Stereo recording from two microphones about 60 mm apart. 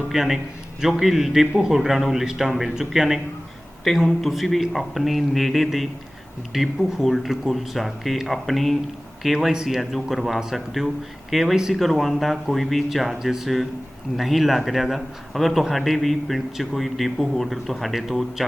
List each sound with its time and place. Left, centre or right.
0.1 s a man's voice: centre
3.8 s a man's voice: centre